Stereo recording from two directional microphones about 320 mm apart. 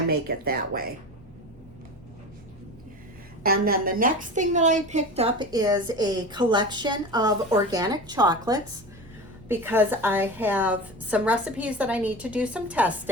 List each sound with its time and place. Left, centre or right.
0.1 s speech: right
3.4 s a woman's voice: right; by 12.9 s centre